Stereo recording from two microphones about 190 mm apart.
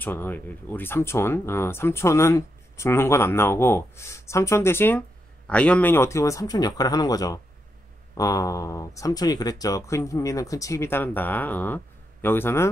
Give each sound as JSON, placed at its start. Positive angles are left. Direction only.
{"t": 0.0, "sound": "speech", "side_deg": 10}